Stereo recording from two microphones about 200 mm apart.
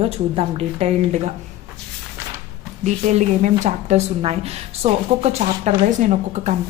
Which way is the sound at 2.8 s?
35° right (ahead or behind).